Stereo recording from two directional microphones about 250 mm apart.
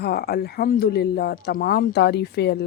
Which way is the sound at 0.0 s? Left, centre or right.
Left.